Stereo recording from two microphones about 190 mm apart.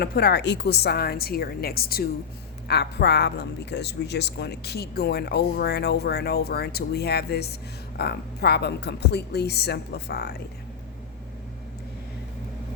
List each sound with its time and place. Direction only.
0.0 s a woman's voice: 55° left (ahead or behind)